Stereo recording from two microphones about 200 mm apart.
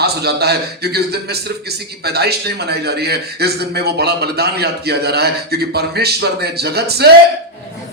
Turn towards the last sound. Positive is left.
turn(degrees=-55)  # may be behind; listen again after turning